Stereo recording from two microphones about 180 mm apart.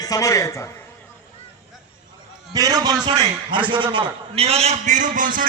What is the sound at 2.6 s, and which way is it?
A man's voice, 20° right (ahead or behind).